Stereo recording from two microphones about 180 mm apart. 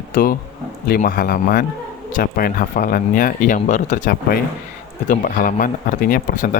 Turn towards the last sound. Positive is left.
turn(degrees=50)  # may be behind; listen again after turning